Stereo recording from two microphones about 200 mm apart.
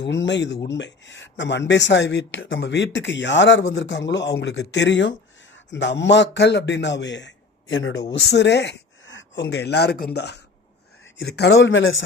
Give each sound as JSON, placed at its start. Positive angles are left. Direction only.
{"t": 0.0, "sound": "a man's voice", "side_deg": 65}